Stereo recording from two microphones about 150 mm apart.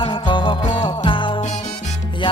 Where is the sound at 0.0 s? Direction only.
30° left (ahead or behind).